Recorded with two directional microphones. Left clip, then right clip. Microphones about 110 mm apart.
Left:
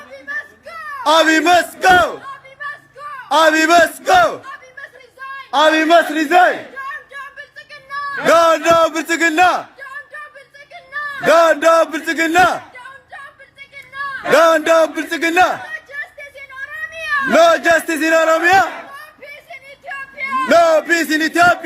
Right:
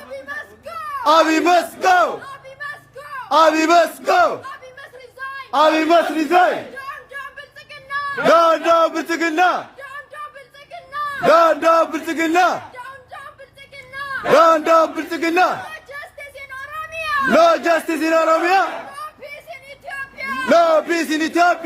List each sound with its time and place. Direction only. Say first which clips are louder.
0.3 s baby cry: left 4 dB; 15° right (ahead or behind)
1.0 s a man's voice: left 2 dB; 20° left (ahead or behind)
3.2 s a man's voice: left 2 dB; 20° left (ahead or behind)
5.5 s a man's voice: left 3 dB; 20° left (ahead or behind)
6.7 s a sound: left 3 dB; 15° right (ahead or behind)
8.3 s a man's voice: left 2 dB; 30° left (ahead or behind)
11.3 s speech: left 2 dB; 25° left (ahead or behind)
14.3 s a man's voice: left 1 dB; 15° left (ahead or behind)
17.3 s a man's voice: left 3 dB; 20° left (ahead or behind)
20.1 s a sound: left 6 dB; 40° right (ahead or behind)
20.5 s speech: left 2 dB; 25° left (ahead or behind)